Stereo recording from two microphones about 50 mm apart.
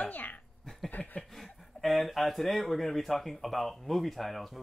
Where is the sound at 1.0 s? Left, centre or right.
Centre.